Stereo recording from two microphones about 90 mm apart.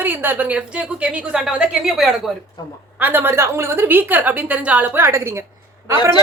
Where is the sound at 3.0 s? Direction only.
25° right (ahead or behind).